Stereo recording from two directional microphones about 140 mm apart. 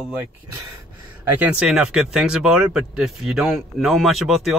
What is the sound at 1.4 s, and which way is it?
Speech, 5° right (ahead or behind).